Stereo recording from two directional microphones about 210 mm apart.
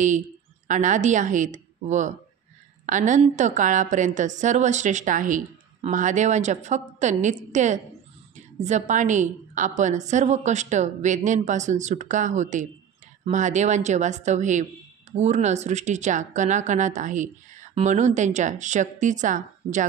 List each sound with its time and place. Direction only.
0.7 s speech: 35° right (ahead or behind)